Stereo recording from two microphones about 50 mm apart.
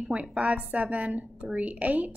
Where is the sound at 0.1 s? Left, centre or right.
Right.